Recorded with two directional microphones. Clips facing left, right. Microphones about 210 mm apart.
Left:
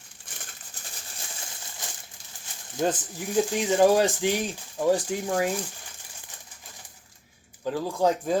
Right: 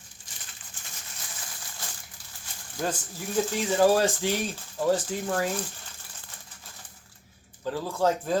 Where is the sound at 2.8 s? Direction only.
20° left (ahead or behind).